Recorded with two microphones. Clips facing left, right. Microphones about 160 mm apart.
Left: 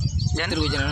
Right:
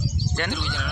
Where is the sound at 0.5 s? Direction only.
90° left.